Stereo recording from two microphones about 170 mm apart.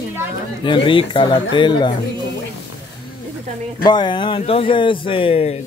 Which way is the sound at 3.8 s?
25° left (ahead or behind).